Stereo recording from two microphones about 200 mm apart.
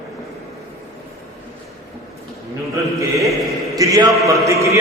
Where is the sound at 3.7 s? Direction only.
15° right (ahead or behind).